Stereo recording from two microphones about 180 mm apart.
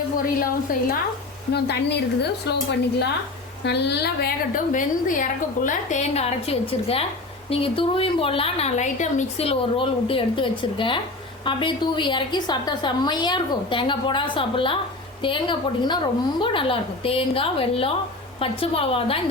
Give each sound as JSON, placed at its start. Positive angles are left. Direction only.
{"t": 0.3, "sound": "a woman's voice", "side_deg": 50}
{"t": 1.5, "sound": "a woman's voice", "side_deg": 65}
{"t": 3.6, "sound": "a woman's voice", "side_deg": 70}